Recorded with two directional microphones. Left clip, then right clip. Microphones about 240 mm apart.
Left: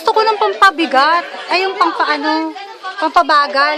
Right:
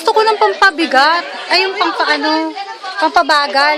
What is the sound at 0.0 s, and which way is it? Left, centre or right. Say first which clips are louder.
A woman's voice: right 2 dB; centre.